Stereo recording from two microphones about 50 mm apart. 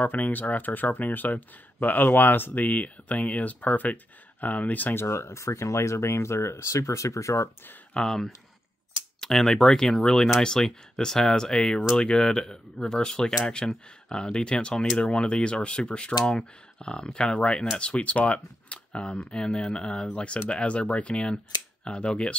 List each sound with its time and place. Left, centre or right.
0.0 s speech: left
4.9 s speech: left
7.9 s speech: centre